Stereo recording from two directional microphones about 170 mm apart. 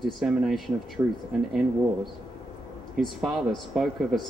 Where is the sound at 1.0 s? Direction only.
20° right (ahead or behind).